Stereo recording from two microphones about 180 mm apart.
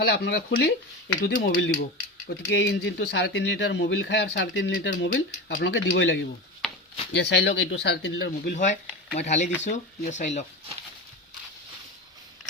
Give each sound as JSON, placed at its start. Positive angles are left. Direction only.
{"t": 0.0, "sound": "speech", "side_deg": 65}
{"t": 1.2, "sound": "speech", "side_deg": 90}
{"t": 2.5, "sound": "speech", "side_deg": 75}
{"t": 5.1, "sound": "speech", "side_deg": 50}
{"t": 5.6, "sound": "speech", "side_deg": 75}
{"t": 8.5, "sound": "speech", "side_deg": 40}